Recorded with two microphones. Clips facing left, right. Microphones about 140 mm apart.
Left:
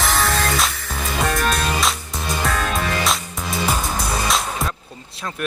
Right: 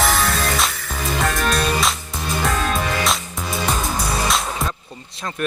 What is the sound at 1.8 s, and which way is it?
Music, centre (ahead or behind).